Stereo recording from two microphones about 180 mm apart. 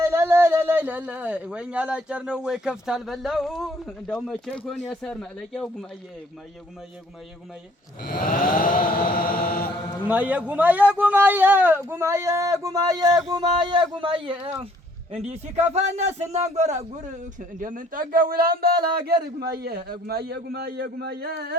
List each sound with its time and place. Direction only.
0.0 s speech: 15° right (ahead or behind); by 5.6 s centre (ahead or behind)
8.0 s mantra: 55° left (ahead or behind)
10.1 s a man's voice: 10° right (ahead or behind); by 21.5 s 60° right (ahead or behind)